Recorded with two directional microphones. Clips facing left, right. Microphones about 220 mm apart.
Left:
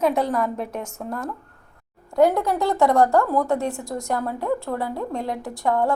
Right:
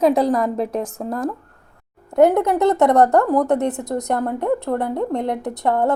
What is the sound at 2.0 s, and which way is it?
A woman's voice, 20° right (ahead or behind).